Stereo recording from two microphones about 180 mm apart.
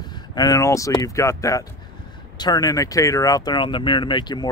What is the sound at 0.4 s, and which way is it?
Speech, 20° left (ahead or behind).